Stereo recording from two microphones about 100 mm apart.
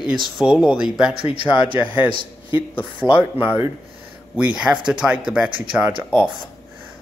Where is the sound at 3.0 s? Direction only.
55° left (ahead or behind).